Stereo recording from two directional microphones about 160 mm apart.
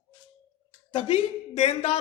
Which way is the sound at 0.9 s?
35° left (ahead or behind).